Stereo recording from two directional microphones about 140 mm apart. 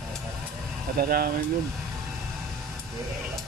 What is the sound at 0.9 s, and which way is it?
Speech, 90° right.